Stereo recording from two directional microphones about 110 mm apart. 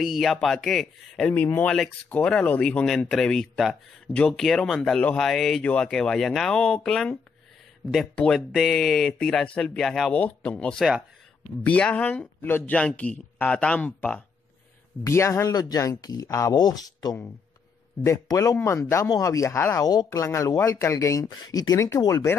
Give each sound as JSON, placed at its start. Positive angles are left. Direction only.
{"t": 0.0, "sound": "a man's voice", "side_deg": 0}
{"t": 10.1, "sound": "a man's voice", "side_deg": 15}
{"t": 15.0, "sound": "speech", "side_deg": 25}
{"t": 19.8, "sound": "speech", "side_deg": 40}
{"t": 20.1, "sound": "speech", "side_deg": 25}